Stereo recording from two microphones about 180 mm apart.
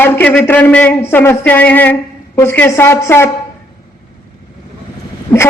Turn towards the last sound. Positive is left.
turn(degrees=15)  # may be behind; listen again after turning